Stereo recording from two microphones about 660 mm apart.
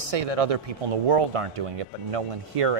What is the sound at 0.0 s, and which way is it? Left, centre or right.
A man's voice, right.